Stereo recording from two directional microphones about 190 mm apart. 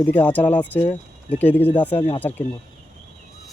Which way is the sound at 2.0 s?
30° left (ahead or behind).